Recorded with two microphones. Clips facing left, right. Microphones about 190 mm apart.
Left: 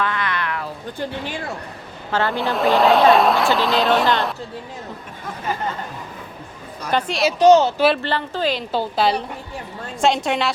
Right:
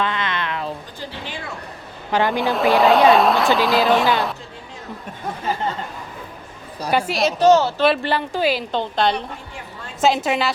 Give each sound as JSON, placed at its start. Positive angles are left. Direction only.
{"t": 0.0, "sound": "a sound", "side_deg": -20}
{"t": 2.1, "sound": "a woman's voice", "side_deg": -15}
{"t": 2.4, "sound": "speech", "side_deg": 0}
{"t": 6.9, "sound": "speech", "side_deg": -5}
{"t": 7.3, "sound": "speech", "side_deg": 15}
{"t": 8.0, "sound": "a woman's voice", "side_deg": -10}
{"t": 8.7, "sound": "speech", "side_deg": 5}